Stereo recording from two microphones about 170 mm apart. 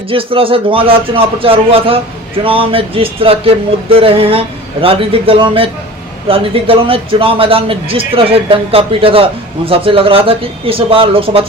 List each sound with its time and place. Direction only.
0.1 s a man's voice: 30° right (ahead or behind)